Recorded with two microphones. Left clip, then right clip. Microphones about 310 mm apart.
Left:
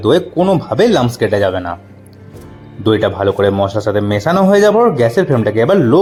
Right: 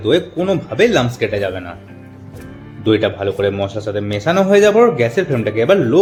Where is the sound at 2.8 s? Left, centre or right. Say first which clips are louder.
Left 3 dB; centre.